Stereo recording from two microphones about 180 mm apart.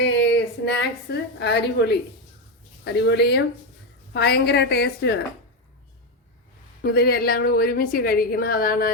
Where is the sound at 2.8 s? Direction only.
70° left (ahead or behind).